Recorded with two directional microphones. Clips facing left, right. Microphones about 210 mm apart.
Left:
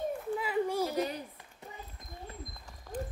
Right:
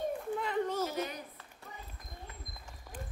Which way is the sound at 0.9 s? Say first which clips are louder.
Left 4 dB; 35° left (ahead or behind).